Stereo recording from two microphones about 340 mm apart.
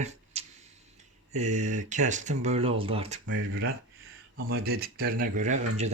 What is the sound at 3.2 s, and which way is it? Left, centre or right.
Speech, right.